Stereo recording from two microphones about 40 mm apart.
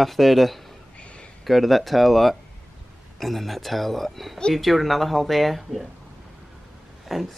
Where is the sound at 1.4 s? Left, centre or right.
Centre.